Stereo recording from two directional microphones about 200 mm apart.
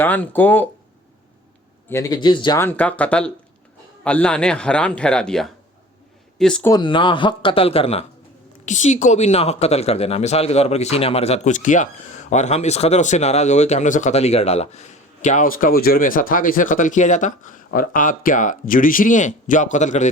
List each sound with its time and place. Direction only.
0.0 s speech: 10° left (ahead or behind)
1.9 s speech: 15° left (ahead or behind)
2.6 s a man's voice: 10° left (ahead or behind)
6.7 s speech: 20° left (ahead or behind)